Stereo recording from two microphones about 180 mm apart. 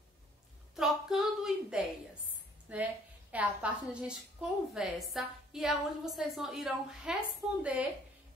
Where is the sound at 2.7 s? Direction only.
10° right (ahead or behind).